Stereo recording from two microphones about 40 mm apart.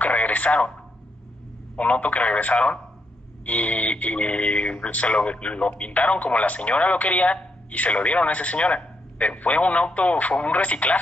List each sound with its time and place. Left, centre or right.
0.0 s radio: left
1.8 s speech: left